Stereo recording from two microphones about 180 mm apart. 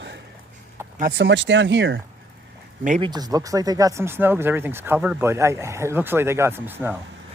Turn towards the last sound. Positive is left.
turn(degrees=-10)  # may be behind; listen again after turning